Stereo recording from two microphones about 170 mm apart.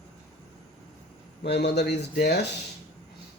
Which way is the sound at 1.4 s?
80° left.